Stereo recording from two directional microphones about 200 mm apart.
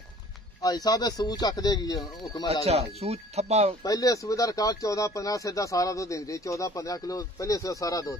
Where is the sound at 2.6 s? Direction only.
30° right (ahead or behind).